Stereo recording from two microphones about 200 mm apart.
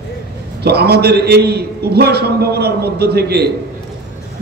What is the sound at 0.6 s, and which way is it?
A man's voice, 55° right (ahead or behind).